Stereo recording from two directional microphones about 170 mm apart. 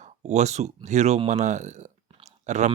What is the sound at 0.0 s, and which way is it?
Speech, 45° right (ahead or behind).